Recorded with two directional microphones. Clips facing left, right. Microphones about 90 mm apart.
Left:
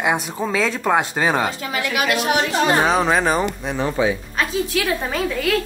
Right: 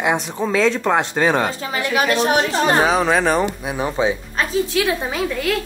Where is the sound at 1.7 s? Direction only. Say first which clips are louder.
Right 3 dB; 35° right (ahead or behind).